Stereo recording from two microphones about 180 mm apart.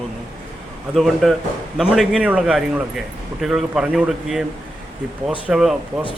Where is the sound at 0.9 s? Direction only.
Centre (ahead or behind).